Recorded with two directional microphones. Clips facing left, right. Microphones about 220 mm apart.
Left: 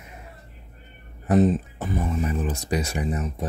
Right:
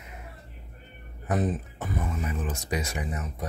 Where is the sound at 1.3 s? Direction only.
25° left (ahead or behind).